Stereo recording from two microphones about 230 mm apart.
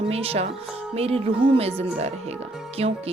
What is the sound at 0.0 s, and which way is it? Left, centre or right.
Speech, right.